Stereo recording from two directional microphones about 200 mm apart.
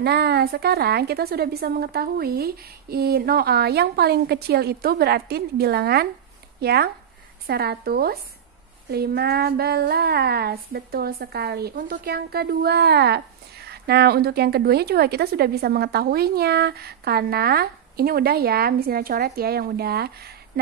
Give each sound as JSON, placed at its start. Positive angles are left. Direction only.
{"t": 0.0, "sound": "a woman's voice", "side_deg": -55}